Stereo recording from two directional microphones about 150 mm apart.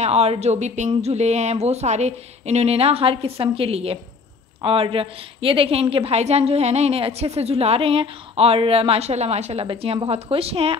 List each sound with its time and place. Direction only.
0.0 s a woman's voice: 45° right (ahead or behind)